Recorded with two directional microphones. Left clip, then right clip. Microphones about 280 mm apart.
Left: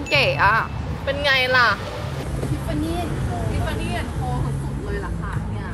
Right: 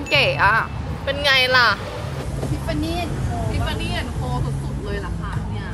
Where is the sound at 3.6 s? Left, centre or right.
Centre.